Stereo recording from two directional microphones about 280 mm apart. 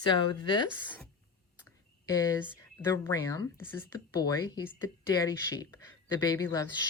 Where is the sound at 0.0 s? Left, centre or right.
Centre.